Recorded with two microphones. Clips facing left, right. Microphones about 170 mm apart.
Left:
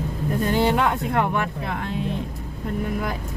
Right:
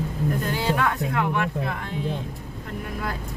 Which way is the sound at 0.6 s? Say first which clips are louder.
Left 3 dB; 20° left (ahead or behind).